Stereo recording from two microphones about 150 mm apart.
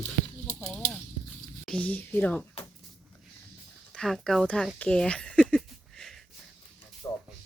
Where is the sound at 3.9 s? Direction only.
5° left (ahead or behind).